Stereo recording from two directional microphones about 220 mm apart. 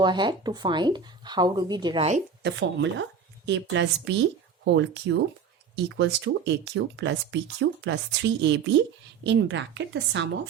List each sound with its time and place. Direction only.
0.0 s speech: 20° right (ahead or behind)
2.4 s a woman's voice: 55° right (ahead or behind)